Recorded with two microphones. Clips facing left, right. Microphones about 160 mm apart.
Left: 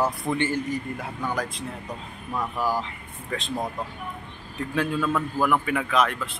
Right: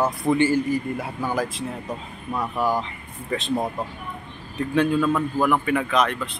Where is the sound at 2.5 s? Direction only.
25° right (ahead or behind).